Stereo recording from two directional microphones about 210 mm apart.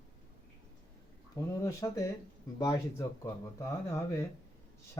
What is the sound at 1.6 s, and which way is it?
Speech, 15° left (ahead or behind).